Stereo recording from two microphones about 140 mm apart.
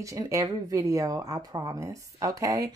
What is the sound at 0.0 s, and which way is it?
Speech, 25° right (ahead or behind).